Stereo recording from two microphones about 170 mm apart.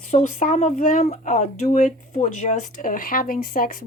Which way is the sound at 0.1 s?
45° left (ahead or behind).